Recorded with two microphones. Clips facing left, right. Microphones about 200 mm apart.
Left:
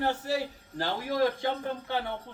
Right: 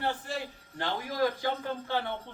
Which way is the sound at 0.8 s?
30° left (ahead or behind).